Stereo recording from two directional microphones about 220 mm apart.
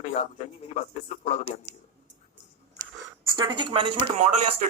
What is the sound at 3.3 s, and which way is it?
Speech, 20° right (ahead or behind).